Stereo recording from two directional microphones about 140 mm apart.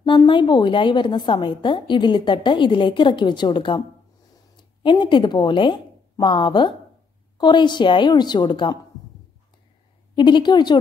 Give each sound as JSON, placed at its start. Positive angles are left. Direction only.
{"t": 0.0, "sound": "a woman's voice", "side_deg": 35}
{"t": 4.8, "sound": "a woman's voice", "side_deg": 35}
{"t": 10.1, "sound": "a woman's voice", "side_deg": 35}